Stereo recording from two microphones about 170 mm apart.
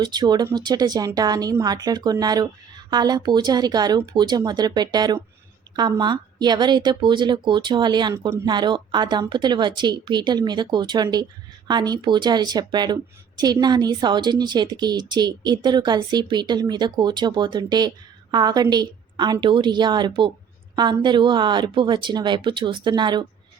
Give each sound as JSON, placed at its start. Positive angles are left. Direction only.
{"t": 0.0, "sound": "a woman's voice", "side_deg": -25}